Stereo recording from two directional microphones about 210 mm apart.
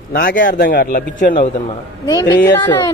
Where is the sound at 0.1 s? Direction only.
45° left (ahead or behind).